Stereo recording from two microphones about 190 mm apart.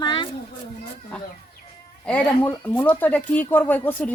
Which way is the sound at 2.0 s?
5° left (ahead or behind).